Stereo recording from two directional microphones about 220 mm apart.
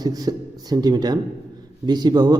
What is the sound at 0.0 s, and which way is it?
A man's voice, 15° right (ahead or behind).